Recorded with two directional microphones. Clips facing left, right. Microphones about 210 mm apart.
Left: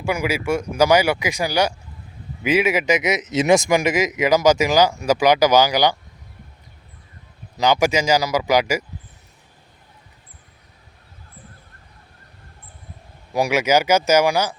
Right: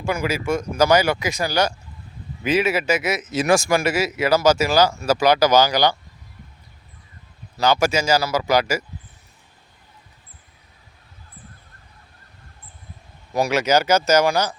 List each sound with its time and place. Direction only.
0.0 s speech: 10° left (ahead or behind)
7.5 s speech: 15° left (ahead or behind)
13.3 s speech: 10° left (ahead or behind)